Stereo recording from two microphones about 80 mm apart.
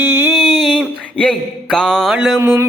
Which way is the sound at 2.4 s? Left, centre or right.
Right.